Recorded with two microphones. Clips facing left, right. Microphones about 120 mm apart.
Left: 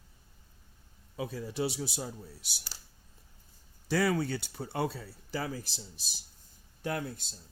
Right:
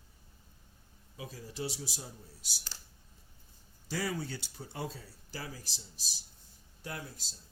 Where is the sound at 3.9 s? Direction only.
70° left (ahead or behind).